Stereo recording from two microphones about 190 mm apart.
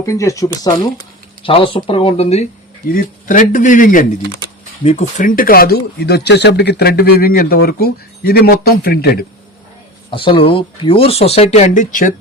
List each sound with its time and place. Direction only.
0.0 s speech: 15° left (ahead or behind); by 2.5 s 35° left (ahead or behind)
2.9 s a man's voice: 45° left (ahead or behind)
10.1 s speech: 25° left (ahead or behind); by 12.1 s 45° left (ahead or behind)